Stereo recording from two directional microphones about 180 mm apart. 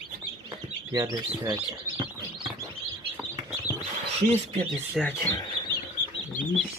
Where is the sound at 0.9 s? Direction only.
20° right (ahead or behind).